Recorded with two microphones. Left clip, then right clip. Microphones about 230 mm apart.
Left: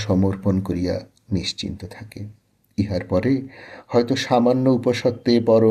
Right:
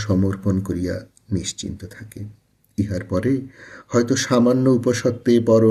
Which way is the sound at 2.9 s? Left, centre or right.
Centre.